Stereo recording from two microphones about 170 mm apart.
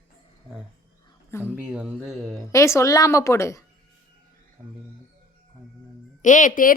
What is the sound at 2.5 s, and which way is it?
A woman's voice, 15° left (ahead or behind).